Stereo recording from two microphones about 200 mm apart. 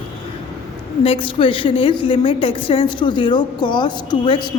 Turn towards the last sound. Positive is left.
turn(degrees=20)  # may be behind; listen again after turning